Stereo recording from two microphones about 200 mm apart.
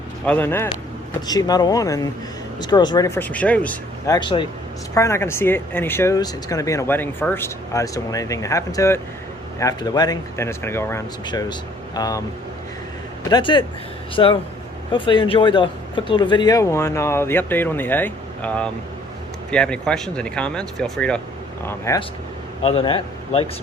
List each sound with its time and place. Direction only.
0.3 s speech: 10° left (ahead or behind)
3.2 s speech: 5° left (ahead or behind)
4.1 s speech: 25° left (ahead or behind)
13.3 s speech: 20° left (ahead or behind); by 21.2 s 5° left (ahead or behind)
21.7 s speech: 15° left (ahead or behind)
22.6 s speech: 30° left (ahead or behind)